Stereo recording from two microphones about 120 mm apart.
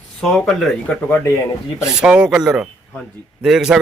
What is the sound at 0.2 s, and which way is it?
Speech, 5° left (ahead or behind).